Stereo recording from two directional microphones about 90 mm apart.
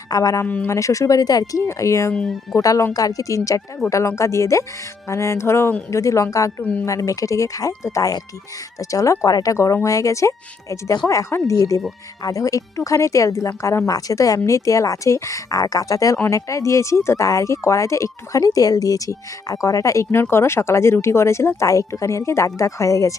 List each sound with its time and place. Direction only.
0.1 s speech: 40° left (ahead or behind)
0.4 s speech: 15° left (ahead or behind)
0.7 s speech: 35° left (ahead or behind)
1.6 s speech: 35° left (ahead or behind)
2.1 s speech: 5° left (ahead or behind)
2.6 s speech: 40° left (ahead or behind)
6.6 s speech: 15° left (ahead or behind)
6.8 s speech: 35° left (ahead or behind)